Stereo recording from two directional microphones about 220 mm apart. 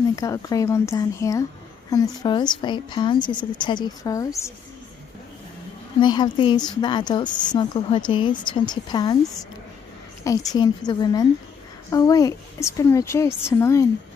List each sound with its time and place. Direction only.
0.1 s a woman's voice: 15° left (ahead or behind)
5.9 s a woman's voice: 20° left (ahead or behind)
10.2 s a woman's voice: 15° left (ahead or behind)